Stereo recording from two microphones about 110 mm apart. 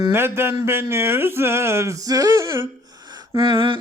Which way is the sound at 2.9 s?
35° right (ahead or behind).